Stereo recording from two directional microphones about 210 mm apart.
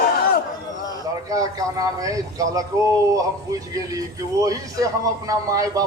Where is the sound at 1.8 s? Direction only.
15° right (ahead or behind).